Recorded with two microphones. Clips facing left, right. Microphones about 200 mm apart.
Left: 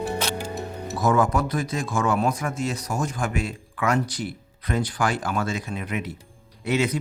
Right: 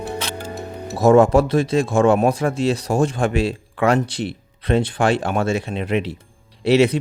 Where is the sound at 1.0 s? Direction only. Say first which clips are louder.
Right 9 dB; 25° right (ahead or behind).